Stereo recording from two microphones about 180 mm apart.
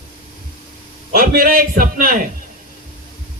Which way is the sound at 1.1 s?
55° right (ahead or behind).